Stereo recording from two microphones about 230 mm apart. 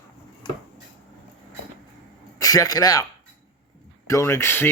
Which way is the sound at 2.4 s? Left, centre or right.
Centre.